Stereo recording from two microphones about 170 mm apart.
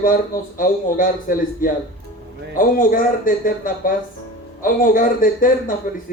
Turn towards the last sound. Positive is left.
turn(degrees=55)  # may be behind; listen again after turning